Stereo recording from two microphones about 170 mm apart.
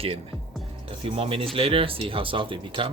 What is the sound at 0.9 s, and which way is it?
Speech, 35° right (ahead or behind).